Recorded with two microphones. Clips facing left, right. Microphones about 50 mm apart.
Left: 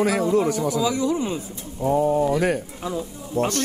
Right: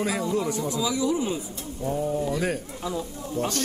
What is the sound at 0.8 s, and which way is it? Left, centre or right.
Speech, left.